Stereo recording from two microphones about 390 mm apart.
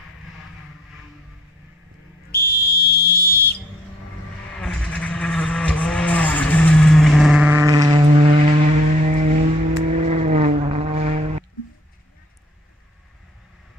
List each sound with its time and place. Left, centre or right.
2.3 s whistle: left
4.6 s vehicle: centre